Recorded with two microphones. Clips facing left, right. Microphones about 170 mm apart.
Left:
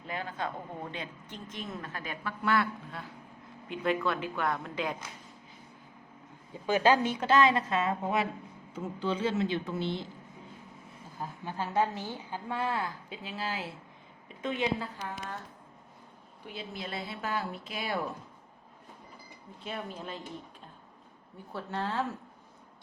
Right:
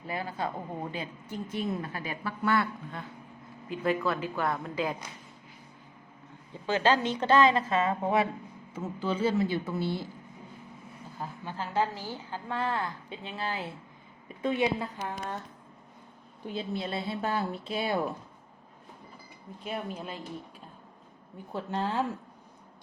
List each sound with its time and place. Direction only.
0.0 s a woman's voice: 5° right (ahead or behind)
6.7 s a woman's voice: 10° left (ahead or behind); by 9.3 s 5° right (ahead or behind)
9.7 s a woman's voice: 20° left (ahead or behind)
11.4 s a woman's voice: 15° left (ahead or behind)
14.4 s a woman's voice: 10° right (ahead or behind)
16.6 s a woman's voice: 30° right (ahead or behind)
19.6 s a woman's voice: 10° right (ahead or behind)
21.5 s a woman's voice: 15° right (ahead or behind)